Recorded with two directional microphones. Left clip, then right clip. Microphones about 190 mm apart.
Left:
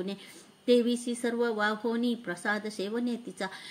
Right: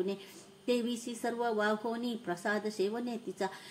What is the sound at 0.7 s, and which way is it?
Speech, 30° left (ahead or behind).